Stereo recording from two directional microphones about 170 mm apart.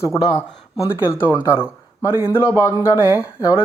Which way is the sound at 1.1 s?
10° left (ahead or behind).